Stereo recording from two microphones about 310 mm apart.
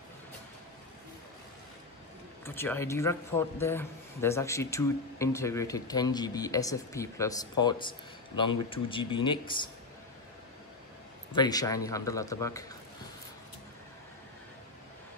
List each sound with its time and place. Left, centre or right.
2.4 s a man's voice: centre
11.3 s a man's voice: centre